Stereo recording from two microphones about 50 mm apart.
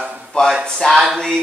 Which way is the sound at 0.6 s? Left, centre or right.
Centre.